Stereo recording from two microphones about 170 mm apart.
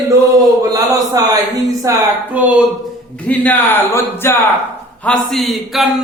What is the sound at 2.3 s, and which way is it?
Speech, 10° right (ahead or behind).